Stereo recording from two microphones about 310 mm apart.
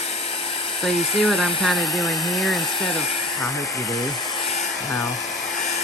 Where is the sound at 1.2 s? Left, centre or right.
Centre.